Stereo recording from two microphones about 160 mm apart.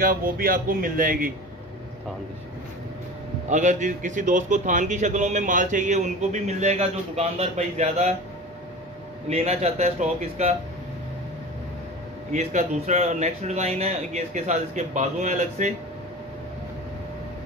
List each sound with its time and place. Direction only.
0.0 s speech: 60° right (ahead or behind)
3.4 s a man's voice: 50° right (ahead or behind)
9.3 s a man's voice: 40° right (ahead or behind)
12.3 s a man's voice: 45° right (ahead or behind)